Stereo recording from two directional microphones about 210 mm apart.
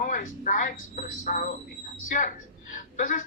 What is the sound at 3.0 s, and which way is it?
Speech, 40° left (ahead or behind).